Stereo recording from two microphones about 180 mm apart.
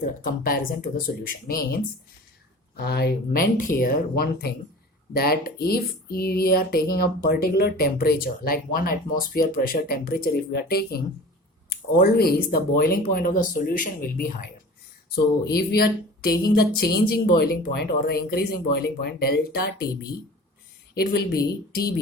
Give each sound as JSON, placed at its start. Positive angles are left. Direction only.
{"t": 0.0, "sound": "speech", "side_deg": 50}
{"t": 15.1, "sound": "speech", "side_deg": 60}
{"t": 20.9, "sound": "speech", "side_deg": 60}